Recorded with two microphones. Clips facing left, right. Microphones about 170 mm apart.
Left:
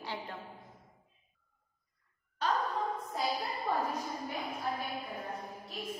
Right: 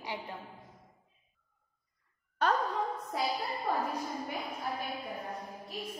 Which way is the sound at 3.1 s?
75° right (ahead or behind).